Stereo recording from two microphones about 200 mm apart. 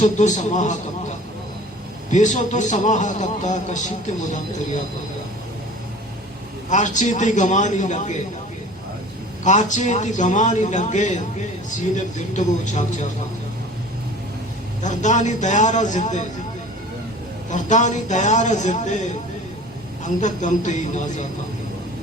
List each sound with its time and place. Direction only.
0.0 s a man's voice: 35° left (ahead or behind)
6.7 s a man's voice: 40° left (ahead or behind)
9.4 s a man's voice: 35° left (ahead or behind)
14.8 s a man's voice: 40° left (ahead or behind)
17.5 s a man's voice: 35° left (ahead or behind)
20.2 s a man's voice: 40° left (ahead or behind)